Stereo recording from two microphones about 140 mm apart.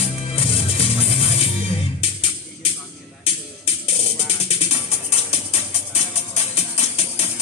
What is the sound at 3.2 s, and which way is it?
Music, 45° left (ahead or behind).